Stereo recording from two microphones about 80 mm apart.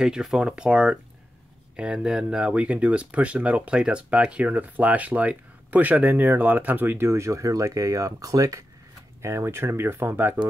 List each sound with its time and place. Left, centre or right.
0.0 s speech: centre; by 10.4 s right